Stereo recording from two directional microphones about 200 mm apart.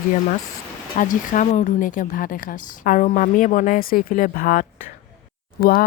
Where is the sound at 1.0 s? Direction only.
40° left (ahead or behind).